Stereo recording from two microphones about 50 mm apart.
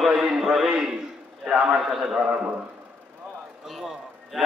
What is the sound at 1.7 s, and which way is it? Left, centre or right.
Speech, centre.